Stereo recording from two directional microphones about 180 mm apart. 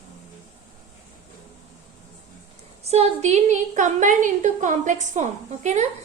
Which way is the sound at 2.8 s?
35° right (ahead or behind).